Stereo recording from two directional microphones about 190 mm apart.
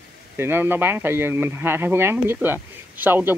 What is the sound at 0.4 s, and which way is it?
Speech, 10° right (ahead or behind).